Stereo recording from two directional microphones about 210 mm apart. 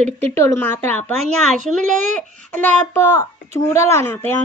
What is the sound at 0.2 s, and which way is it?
Speech, 15° left (ahead or behind).